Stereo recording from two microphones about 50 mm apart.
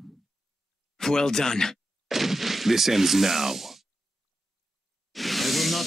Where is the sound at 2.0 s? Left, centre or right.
Centre.